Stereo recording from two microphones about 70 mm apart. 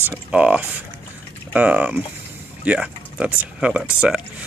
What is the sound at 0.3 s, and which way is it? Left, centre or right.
Speech, centre.